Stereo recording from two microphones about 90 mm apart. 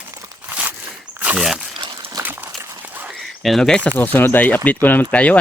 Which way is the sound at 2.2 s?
20° right (ahead or behind).